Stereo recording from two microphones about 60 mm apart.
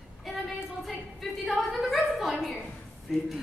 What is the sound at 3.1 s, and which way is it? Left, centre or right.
Speech, centre.